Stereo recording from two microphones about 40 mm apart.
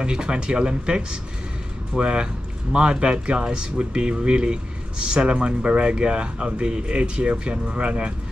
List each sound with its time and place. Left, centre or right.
0.0 s speech: right